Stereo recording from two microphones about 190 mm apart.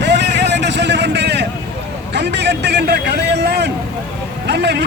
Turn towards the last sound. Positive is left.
turn(degrees=-60)  # may be behind; listen again after turning